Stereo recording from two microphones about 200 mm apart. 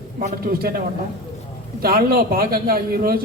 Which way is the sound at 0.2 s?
50° right (ahead or behind).